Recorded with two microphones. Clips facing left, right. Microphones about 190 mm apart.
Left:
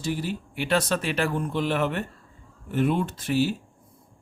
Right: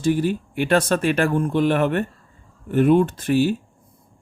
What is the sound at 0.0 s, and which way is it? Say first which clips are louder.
A man's voice: right 9 dB; 50° right (ahead or behind).